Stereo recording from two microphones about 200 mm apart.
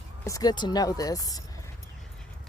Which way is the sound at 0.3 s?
20° left (ahead or behind).